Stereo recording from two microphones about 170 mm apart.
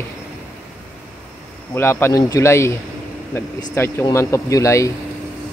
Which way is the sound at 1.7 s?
15° left (ahead or behind).